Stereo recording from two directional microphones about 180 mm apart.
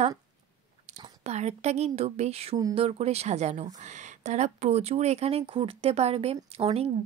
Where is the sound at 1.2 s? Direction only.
40° right (ahead or behind).